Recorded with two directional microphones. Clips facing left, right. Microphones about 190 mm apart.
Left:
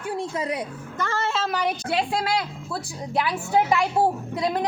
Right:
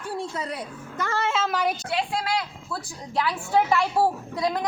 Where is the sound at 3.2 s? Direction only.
15° left (ahead or behind).